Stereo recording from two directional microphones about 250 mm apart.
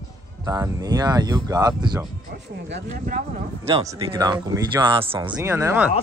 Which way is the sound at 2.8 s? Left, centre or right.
Right.